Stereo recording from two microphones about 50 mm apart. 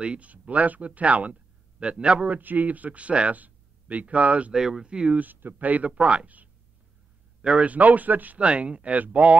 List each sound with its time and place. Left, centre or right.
0.0 s speech: right
4.6 s speech: centre
5.2 s speech: right
8.4 s speech: right